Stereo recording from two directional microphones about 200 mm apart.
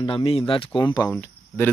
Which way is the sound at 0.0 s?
25° left (ahead or behind).